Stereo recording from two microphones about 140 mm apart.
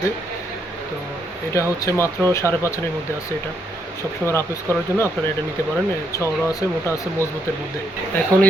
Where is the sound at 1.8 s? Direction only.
20° left (ahead or behind).